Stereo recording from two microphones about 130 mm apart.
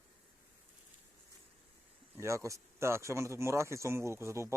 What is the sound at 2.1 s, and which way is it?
Speech, 20° right (ahead or behind).